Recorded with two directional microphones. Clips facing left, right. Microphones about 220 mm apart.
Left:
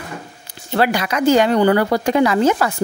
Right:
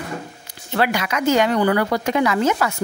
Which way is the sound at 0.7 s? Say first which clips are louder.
Left 3 dB; 35° left (ahead or behind).